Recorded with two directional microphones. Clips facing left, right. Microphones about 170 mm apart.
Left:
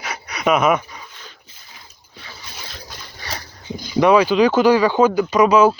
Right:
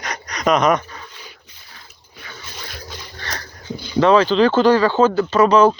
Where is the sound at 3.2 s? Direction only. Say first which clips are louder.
Left 1 dB; 10° left (ahead or behind).